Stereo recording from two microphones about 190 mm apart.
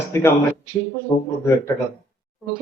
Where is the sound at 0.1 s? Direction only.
15° left (ahead or behind).